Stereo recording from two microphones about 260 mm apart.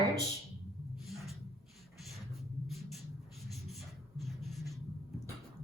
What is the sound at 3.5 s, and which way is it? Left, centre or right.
Writing, centre.